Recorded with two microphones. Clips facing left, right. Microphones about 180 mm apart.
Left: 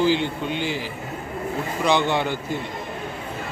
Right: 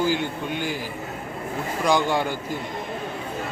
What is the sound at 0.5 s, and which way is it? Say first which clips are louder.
Speech: left 1 dB; 45° right (ahead or behind).